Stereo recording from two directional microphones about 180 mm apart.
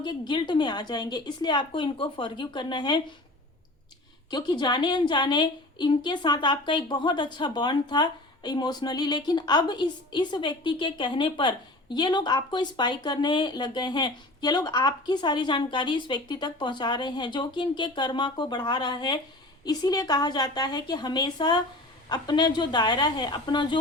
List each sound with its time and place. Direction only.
0.0 s a woman's voice: 25° left (ahead or behind)
4.3 s a woman's voice: 25° left (ahead or behind)